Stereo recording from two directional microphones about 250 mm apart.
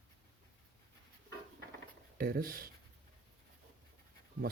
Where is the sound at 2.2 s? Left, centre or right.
Right.